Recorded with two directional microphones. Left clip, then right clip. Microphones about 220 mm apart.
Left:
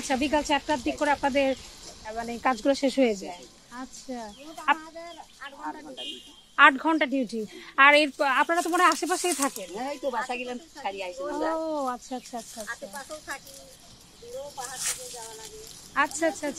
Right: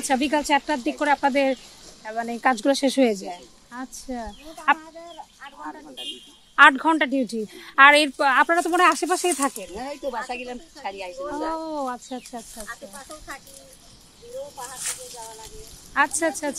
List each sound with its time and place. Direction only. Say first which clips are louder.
0.1 s speech: right 4 dB; 45° right (ahead or behind)
4.7 s chicken: right 1 dB; 15° left (ahead or behind)
6.5 s speech: right 4 dB; 45° right (ahead or behind)
9.8 s speech: even; 5° right (ahead or behind)
11.3 s speech: even; 30° right (ahead or behind)
12.6 s speech: left 1 dB; 25° left (ahead or behind)
14.8 s speech: even; centre (ahead or behind)
15.9 s speech: right 4 dB; 45° right (ahead or behind)